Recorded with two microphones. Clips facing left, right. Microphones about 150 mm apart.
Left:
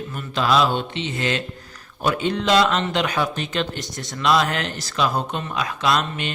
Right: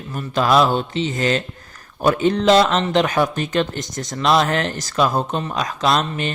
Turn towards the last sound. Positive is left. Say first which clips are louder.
# right 3 dB
turn(degrees=-40)  # may be behind; listen again after turning